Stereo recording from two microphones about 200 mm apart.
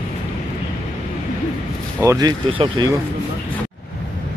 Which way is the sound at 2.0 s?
15° right (ahead or behind).